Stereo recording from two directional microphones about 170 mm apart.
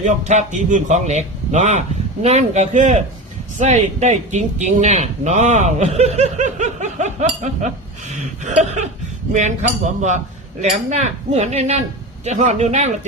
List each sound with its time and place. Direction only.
0.0 s speech: 45° right (ahead or behind)